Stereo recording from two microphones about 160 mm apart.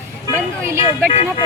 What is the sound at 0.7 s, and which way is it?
Speech, 15° right (ahead or behind).